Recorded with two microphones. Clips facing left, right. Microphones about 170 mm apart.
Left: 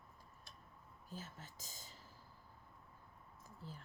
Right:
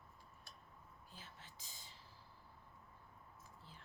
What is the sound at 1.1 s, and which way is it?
Speech, 45° left (ahead or behind).